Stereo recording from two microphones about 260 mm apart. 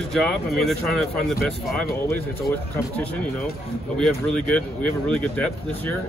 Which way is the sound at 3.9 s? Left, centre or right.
Centre.